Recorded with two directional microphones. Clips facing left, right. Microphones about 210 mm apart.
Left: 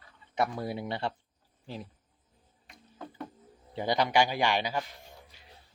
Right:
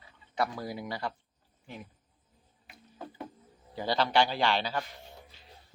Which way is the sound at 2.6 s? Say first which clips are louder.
Even; 5° right (ahead or behind).